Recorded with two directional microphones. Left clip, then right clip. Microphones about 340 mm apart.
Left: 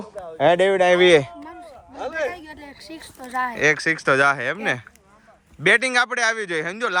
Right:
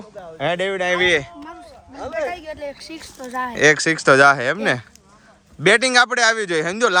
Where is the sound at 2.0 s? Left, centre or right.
Left.